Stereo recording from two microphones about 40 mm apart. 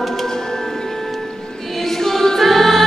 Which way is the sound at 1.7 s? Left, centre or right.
Centre.